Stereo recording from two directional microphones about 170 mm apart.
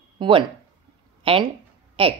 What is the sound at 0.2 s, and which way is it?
A woman's voice, 30° right (ahead or behind).